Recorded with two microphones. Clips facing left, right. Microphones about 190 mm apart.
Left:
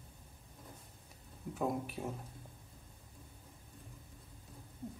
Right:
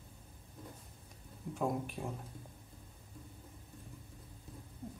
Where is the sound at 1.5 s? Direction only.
Centre (ahead or behind).